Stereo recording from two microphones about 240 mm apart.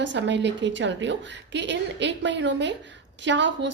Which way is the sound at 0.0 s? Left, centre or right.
Right.